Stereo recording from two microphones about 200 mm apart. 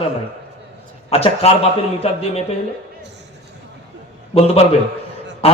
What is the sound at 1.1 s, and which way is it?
Speech, 30° left (ahead or behind).